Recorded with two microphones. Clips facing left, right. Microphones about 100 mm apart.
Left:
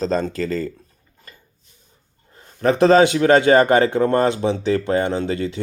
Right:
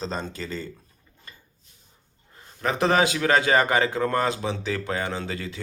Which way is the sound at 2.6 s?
35° left (ahead or behind).